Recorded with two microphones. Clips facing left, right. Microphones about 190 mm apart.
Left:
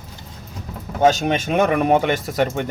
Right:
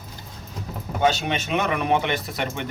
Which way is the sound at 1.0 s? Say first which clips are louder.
Left 6 dB; 45° left (ahead or behind).